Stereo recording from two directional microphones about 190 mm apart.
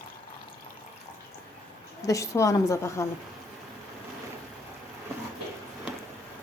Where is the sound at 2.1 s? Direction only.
15° left (ahead or behind).